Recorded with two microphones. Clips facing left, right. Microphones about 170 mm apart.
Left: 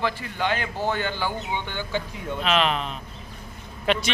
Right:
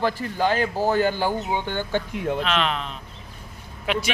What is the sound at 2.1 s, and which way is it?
Speech, 75° right (ahead or behind).